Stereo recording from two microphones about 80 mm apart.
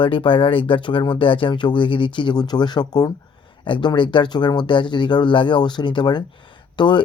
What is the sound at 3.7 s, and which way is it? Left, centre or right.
Speech, left.